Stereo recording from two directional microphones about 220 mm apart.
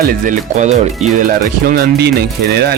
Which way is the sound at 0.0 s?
40° right (ahead or behind).